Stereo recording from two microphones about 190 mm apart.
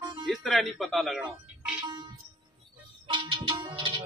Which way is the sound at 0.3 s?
Centre (ahead or behind).